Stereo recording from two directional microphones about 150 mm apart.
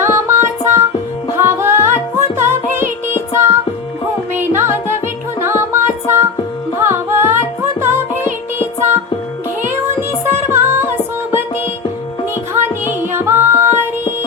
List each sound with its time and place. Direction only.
0.0 s music: 15° right (ahead or behind)
10.2 s music: 15° right (ahead or behind)
12.8 s music: 15° right (ahead or behind)